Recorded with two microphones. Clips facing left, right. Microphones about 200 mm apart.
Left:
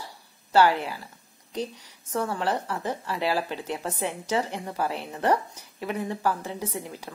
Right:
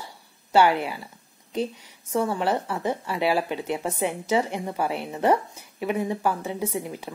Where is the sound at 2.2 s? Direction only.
5° right (ahead or behind).